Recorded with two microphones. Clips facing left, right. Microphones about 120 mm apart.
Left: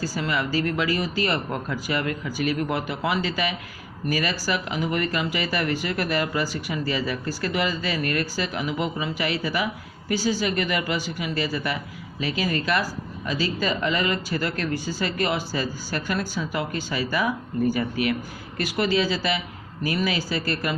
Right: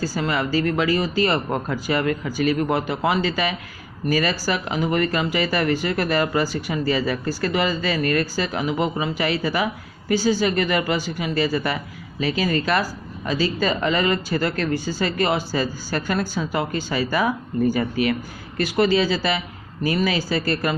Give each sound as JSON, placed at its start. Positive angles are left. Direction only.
{"t": 0.1, "sound": "speech", "side_deg": -35}